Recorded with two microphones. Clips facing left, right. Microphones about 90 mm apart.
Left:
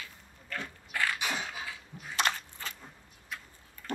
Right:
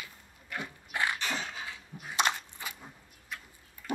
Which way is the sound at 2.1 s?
20° right (ahead or behind).